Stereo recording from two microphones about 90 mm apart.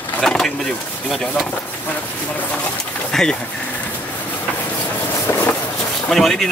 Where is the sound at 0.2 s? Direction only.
5° left (ahead or behind).